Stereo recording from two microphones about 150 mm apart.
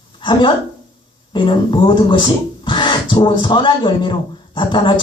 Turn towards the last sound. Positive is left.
turn(degrees=35)  # may be behind; listen again after turning